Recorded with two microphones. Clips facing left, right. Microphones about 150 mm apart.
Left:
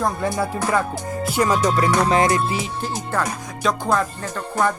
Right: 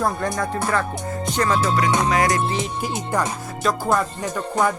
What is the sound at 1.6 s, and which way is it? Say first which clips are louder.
Music: left 2 dB; 30° left (ahead or behind).